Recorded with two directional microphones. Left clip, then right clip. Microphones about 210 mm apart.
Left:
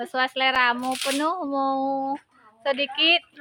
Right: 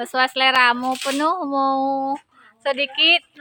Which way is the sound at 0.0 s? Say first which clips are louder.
Right 5 dB; 20° right (ahead or behind).